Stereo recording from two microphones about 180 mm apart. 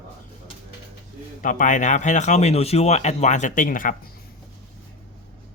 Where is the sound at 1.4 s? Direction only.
45° left (ahead or behind).